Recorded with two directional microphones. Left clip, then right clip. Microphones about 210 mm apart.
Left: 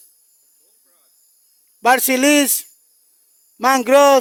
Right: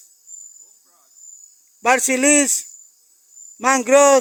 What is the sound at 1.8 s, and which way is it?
Speech, 20° left (ahead or behind).